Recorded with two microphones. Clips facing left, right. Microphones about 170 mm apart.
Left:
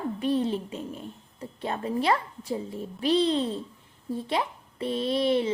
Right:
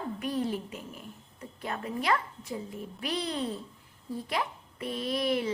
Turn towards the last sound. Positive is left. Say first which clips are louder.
# left 5 dB
turn(degrees=25)  # may be behind; listen again after turning